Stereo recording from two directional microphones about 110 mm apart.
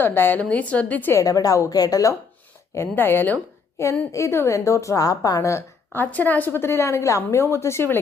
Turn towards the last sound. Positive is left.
turn(degrees=25)  # may be behind; listen again after turning